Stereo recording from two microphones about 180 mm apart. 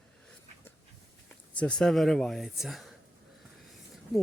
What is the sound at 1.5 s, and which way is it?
Speech, 5° left (ahead or behind).